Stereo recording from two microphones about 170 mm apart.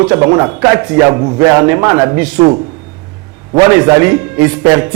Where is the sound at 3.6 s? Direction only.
15° right (ahead or behind).